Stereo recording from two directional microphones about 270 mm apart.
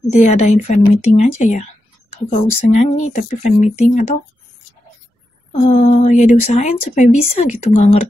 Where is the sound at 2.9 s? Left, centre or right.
Left.